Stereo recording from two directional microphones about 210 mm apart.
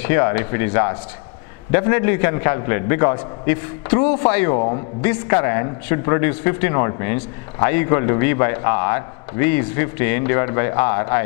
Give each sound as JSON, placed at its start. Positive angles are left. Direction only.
{"t": 0.0, "sound": "a man's voice", "side_deg": 15}
{"t": 4.5, "sound": "a man's voice", "side_deg": 30}
{"t": 5.0, "sound": "a man's voice", "side_deg": 15}